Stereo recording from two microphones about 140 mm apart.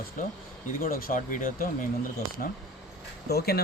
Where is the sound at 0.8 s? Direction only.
90° left.